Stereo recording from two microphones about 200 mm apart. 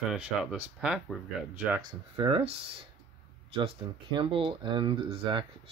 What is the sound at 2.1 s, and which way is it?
Speech, 25° right (ahead or behind).